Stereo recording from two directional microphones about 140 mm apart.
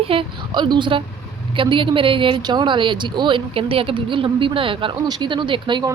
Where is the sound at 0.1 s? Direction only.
35° right (ahead or behind).